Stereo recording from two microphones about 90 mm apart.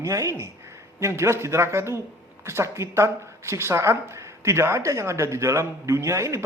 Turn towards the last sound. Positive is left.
turn(degrees=-35)  # may be behind; listen again after turning